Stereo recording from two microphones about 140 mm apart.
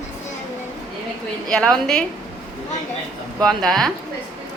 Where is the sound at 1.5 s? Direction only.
5° left (ahead or behind).